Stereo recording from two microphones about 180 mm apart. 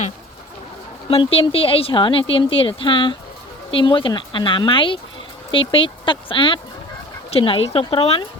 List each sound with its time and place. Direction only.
1.1 s speech: 30° left (ahead or behind)